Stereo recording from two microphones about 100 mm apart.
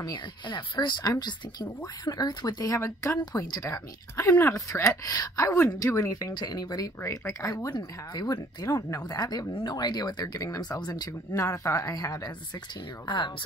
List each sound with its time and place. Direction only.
0.0 s speech: 50° left (ahead or behind); by 6.3 s 30° left (ahead or behind)
6.3 s speech: 45° left (ahead or behind)
7.0 s speech: 25° left (ahead or behind)
7.7 s speech: 45° left (ahead or behind)
8.6 s speech: 30° left (ahead or behind)
11.3 s speech: 30° left (ahead or behind); by 13.3 s 50° left (ahead or behind)